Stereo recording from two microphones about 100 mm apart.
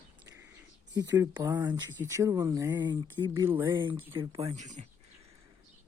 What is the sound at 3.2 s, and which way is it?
Speech, 50° right (ahead or behind).